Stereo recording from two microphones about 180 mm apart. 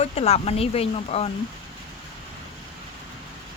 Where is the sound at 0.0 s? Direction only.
35° left (ahead or behind).